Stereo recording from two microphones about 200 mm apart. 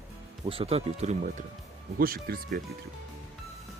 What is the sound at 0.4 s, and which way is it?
Speech, 30° right (ahead or behind).